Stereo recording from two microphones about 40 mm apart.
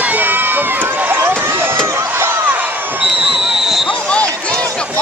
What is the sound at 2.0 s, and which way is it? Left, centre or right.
Slam, right.